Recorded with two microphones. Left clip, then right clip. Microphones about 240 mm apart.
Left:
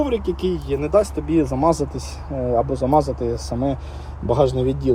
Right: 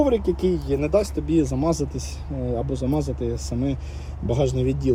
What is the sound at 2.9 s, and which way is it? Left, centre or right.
Speech, left.